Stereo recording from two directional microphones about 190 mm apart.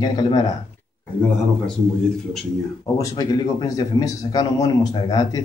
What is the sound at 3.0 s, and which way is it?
Speech, 20° left (ahead or behind).